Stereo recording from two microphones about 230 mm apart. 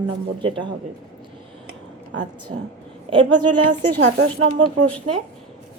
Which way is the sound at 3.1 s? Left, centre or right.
Right.